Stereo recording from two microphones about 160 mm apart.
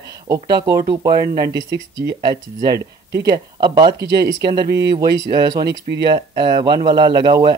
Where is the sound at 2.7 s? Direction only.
90° right.